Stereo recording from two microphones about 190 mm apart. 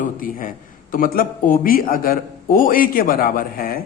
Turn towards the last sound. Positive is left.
turn(degrees=50)  # may be behind; listen again after turning